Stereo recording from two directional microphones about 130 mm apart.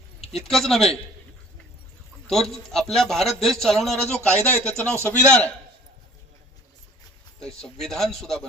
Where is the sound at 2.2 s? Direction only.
Centre (ahead or behind).